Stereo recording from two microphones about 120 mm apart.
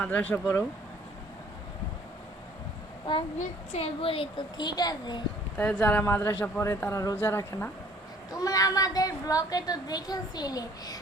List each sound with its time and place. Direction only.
0.0 s speech: 10° left (ahead or behind)
3.3 s a child's voice: 60° left (ahead or behind); by 5.2 s 35° left (ahead or behind)
5.5 s speech: 10° left (ahead or behind)
8.3 s a woman's voice: 30° left (ahead or behind)